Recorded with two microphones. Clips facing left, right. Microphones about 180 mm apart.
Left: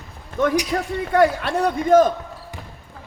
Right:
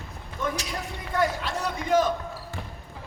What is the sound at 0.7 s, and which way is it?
A man's voice, 65° left (ahead or behind).